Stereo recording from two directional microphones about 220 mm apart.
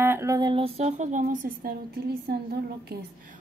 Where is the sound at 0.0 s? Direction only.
10° right (ahead or behind); by 3.1 s 45° right (ahead or behind).